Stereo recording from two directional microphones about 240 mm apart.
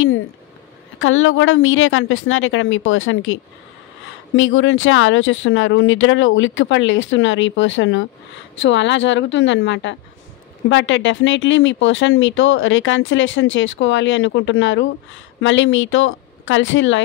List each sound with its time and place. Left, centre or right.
0.9 s speech: left
4.4 s speech: left